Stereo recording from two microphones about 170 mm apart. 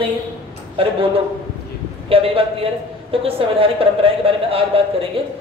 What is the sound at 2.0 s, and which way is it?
A man's voice, 35° right (ahead or behind).